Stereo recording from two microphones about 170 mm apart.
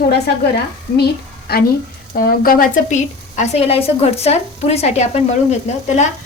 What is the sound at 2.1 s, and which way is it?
Speech, 60° left (ahead or behind).